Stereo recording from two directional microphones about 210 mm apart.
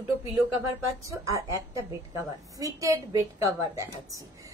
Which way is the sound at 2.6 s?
15° right (ahead or behind).